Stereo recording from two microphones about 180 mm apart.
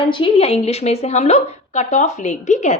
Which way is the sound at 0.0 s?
30° left (ahead or behind).